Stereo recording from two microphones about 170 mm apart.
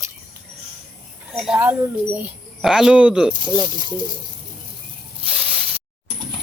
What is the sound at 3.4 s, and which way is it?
Speech, 25° right (ahead or behind).